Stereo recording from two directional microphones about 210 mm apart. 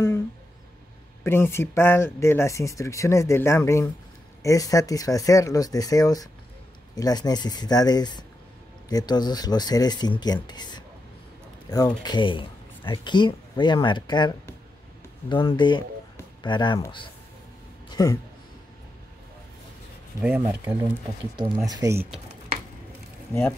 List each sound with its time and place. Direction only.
1.2 s speech: 10° left (ahead or behind)
17.8 s a sound: 15° left (ahead or behind)
20.2 s speech: 5° right (ahead or behind)